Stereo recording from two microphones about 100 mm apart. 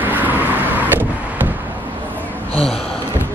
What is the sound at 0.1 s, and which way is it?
Vehicle, 20° right (ahead or behind).